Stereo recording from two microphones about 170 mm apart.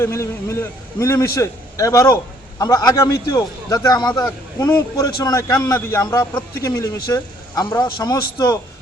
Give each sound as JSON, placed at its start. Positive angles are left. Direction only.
{"t": 0.0, "sound": "a man's voice", "side_deg": 15}